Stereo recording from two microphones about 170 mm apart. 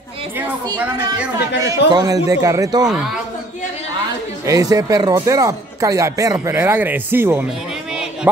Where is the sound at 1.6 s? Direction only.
20° right (ahead or behind).